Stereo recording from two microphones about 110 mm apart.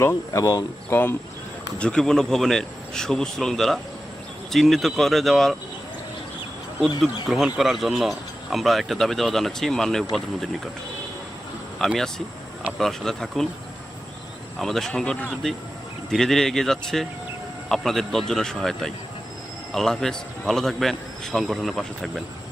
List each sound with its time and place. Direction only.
0.0 s speech: 25° left (ahead or behind)
1.8 s speech: 10° left (ahead or behind)
7.3 s speech: 5° right (ahead or behind)
11.8 s speech: centre (ahead or behind)
14.6 s speech: 5° left (ahead or behind)